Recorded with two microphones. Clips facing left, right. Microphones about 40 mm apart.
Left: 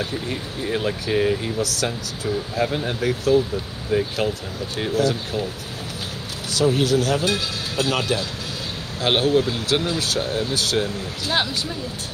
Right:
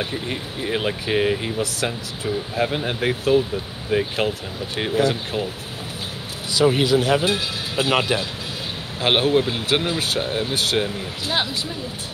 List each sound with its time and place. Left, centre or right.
0.0 s speech: right
1.6 s speech: right
6.6 s speech: right